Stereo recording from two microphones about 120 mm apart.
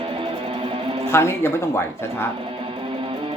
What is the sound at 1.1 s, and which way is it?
Speech, 20° left (ahead or behind).